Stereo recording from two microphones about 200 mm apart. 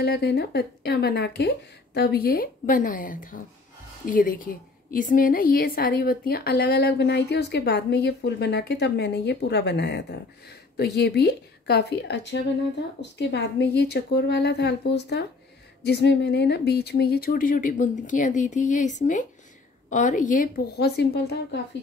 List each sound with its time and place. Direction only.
0.0 s a woman's voice: 55° left (ahead or behind)